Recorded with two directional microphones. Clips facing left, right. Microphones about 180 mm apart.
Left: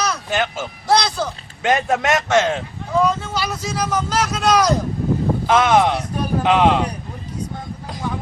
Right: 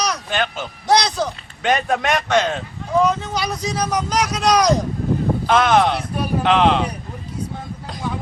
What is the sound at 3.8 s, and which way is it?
Speech, 15° right (ahead or behind).